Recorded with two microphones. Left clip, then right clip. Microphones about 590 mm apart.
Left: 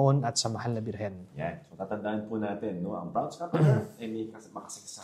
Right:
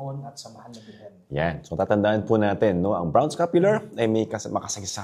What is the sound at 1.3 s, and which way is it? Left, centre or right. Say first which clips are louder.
Speech: right 11 dB; right.